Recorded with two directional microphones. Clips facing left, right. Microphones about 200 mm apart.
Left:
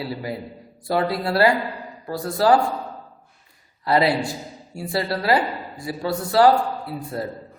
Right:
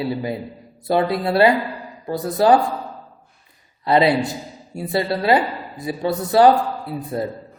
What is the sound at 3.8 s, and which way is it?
A woman's voice, 20° right (ahead or behind).